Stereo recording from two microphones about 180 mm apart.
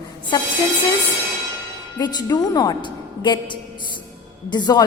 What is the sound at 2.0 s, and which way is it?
A woman's voice, 20° left (ahead or behind).